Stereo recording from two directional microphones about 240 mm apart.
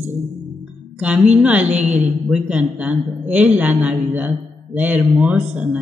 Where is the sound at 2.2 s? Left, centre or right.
Centre.